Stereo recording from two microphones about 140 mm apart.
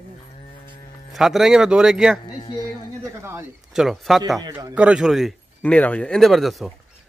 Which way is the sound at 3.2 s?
20° right (ahead or behind).